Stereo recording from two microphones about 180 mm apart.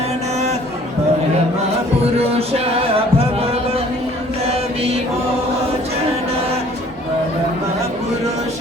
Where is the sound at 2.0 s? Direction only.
35° right (ahead or behind).